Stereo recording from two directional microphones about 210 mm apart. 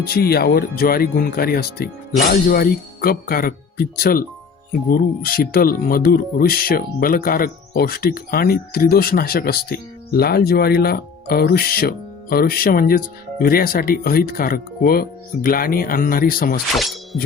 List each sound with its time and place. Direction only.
0.0 s speech: 45° left (ahead or behind)
16.7 s speech: centre (ahead or behind)